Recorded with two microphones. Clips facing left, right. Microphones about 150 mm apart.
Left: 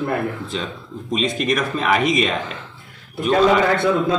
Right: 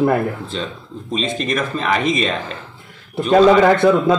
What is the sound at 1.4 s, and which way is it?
Speech, 5° left (ahead or behind).